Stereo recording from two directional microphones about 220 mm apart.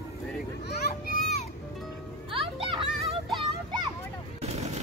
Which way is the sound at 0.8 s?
45° left (ahead or behind).